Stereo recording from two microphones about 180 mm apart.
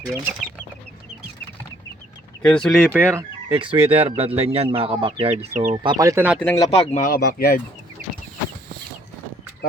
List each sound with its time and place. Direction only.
2.4 s speech: 5° left (ahead or behind); by 3.2 s 15° right (ahead or behind)
3.5 s speech: 30° right (ahead or behind)
5.8 s speech: 20° right (ahead or behind)
6.4 s speech: 10° left (ahead or behind)
6.7 s speech: 35° left (ahead or behind)
7.1 s speech: 60° left (ahead or behind)